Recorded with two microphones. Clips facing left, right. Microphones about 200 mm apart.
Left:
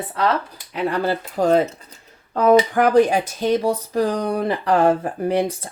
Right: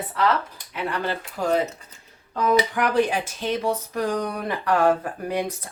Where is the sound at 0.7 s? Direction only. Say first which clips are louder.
Left 6 dB; 35° left (ahead or behind).